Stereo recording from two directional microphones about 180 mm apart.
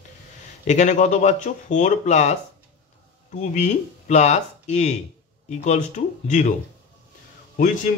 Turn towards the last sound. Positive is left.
turn(degrees=45)  # may be behind; listen again after turning